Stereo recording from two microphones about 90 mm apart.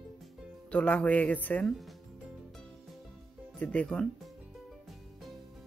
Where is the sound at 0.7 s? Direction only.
15° left (ahead or behind).